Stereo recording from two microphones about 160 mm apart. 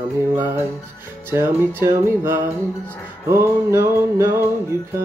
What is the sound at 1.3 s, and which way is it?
Music, 15° right (ahead or behind).